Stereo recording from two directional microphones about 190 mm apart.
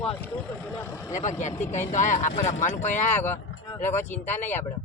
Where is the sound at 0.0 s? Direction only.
5° left (ahead or behind).